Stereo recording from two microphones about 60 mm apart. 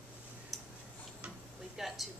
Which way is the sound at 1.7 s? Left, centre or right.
Centre.